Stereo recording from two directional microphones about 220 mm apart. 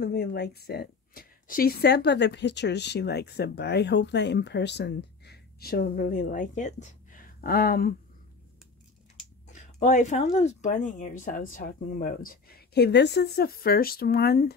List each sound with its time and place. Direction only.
0.0 s a woman's voice: 45° left (ahead or behind)
9.5 s speech: 35° left (ahead or behind)